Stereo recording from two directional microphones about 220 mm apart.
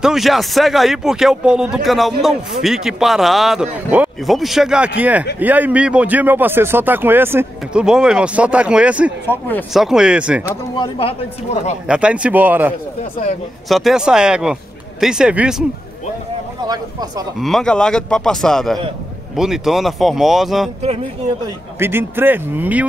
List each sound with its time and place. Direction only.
0.0 s a man's voice: centre (ahead or behind)
9.3 s speech: 10° left (ahead or behind)
9.8 s a man's voice: 5° right (ahead or behind)
10.8 s speech: 25° left (ahead or behind)
11.9 s a man's voice: 5° right (ahead or behind)
17.4 s a man's voice: centre (ahead or behind)
21.7 s speech: 10° right (ahead or behind)